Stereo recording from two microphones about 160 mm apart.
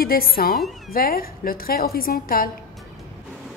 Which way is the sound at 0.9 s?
70° left (ahead or behind).